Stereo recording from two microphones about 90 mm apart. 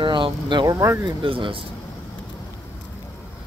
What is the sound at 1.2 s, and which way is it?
Speech, 80° right.